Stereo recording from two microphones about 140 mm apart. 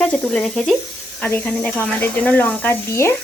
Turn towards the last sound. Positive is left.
turn(degrees=15)  # may be behind; listen again after turning